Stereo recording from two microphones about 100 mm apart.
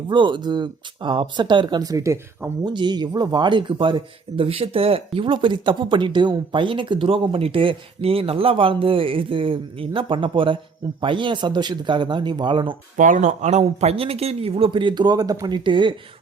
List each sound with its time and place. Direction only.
0.1 s speech: 50° right (ahead or behind)
1.8 s speech: 35° right (ahead or behind)
2.6 s speech: 45° right (ahead or behind)
13.6 s speech: 90° right; by 16.0 s 55° right (ahead or behind)